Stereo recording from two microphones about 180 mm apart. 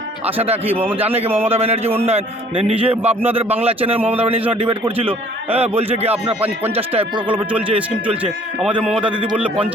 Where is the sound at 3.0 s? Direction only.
10° right (ahead or behind).